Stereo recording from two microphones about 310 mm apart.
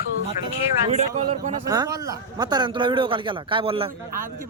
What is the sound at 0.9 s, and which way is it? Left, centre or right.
A man's voice, right.